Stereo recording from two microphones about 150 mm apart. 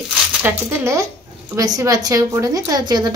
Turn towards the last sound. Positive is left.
turn(degrees=-25)  # may be behind; listen again after turning